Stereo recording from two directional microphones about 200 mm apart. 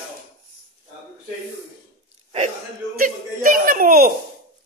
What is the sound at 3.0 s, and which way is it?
Speech, 45° right (ahead or behind).